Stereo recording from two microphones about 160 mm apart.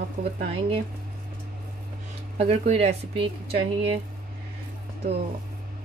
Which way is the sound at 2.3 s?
40° right (ahead or behind).